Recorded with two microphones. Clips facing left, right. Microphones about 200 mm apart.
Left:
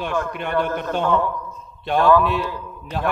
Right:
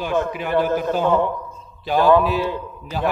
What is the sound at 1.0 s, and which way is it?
Speech, 20° right (ahead or behind).